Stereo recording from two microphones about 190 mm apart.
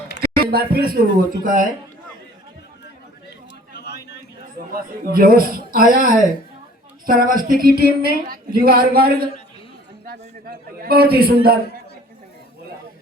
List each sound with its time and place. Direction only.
0.2 s speech: 55° right (ahead or behind)
4.7 s speech: 50° right (ahead or behind)